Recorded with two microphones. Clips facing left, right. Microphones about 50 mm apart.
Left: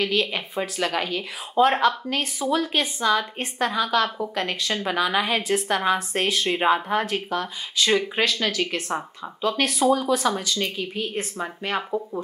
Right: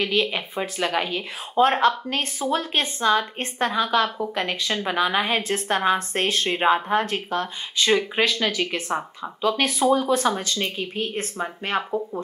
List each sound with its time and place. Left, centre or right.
0.0 s speech: right
1.6 s speech: right; by 4.7 s centre
4.8 s speech: right
8.2 s speech: centre
9.4 s speech: centre
10.1 s speech: right